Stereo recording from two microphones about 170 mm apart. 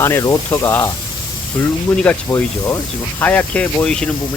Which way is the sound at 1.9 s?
10° left (ahead or behind).